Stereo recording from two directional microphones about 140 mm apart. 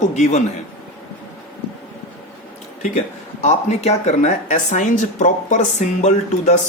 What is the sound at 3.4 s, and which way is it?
Speech, 55° left (ahead or behind).